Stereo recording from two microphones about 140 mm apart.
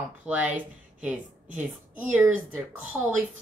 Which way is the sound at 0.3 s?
10° right (ahead or behind).